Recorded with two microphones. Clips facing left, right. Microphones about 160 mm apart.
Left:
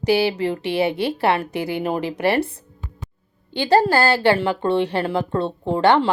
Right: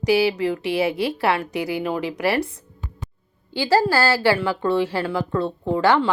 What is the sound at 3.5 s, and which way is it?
A woman's voice, 20° left (ahead or behind).